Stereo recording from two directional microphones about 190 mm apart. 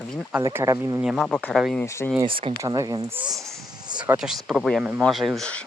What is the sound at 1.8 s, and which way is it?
Speech, 15° left (ahead or behind).